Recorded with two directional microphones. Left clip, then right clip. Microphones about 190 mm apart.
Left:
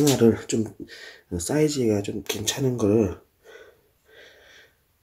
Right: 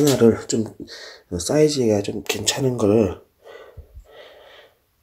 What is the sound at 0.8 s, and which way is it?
Speech, 35° left (ahead or behind).